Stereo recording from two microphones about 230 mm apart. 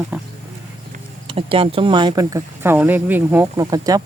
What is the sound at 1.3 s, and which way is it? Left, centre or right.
Speech, right.